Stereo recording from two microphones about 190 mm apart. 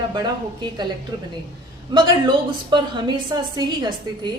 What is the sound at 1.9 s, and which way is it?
A woman's voice, 25° right (ahead or behind).